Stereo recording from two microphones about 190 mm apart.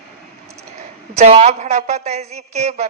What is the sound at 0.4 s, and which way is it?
A woman's voice, 35° right (ahead or behind).